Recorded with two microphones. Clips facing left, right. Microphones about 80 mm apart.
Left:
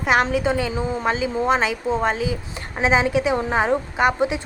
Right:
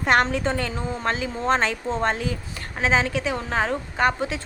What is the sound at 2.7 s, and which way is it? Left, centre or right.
A woman's voice, centre.